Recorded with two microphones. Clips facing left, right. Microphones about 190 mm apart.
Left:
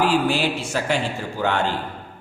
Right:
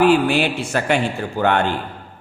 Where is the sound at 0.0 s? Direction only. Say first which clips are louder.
Right 5 dB; 60° right (ahead or behind).